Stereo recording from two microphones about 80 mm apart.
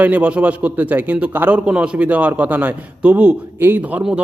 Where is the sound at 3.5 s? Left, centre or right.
Right.